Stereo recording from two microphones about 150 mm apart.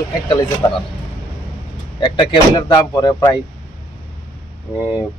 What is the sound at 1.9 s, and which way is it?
Speech, 30° left (ahead or behind).